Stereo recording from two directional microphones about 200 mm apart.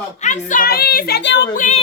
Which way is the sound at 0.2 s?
40° left (ahead or behind).